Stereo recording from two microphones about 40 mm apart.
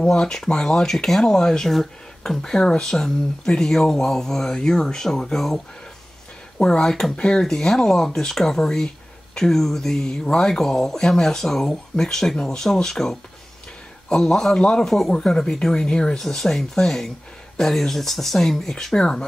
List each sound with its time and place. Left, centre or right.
0.0 s speech: centre
6.6 s speech: centre
7.4 s speech: centre
14.9 s speech: centre
15.1 s speech: centre